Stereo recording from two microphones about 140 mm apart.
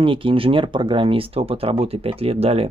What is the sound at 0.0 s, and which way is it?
Speech, 40° right (ahead or behind).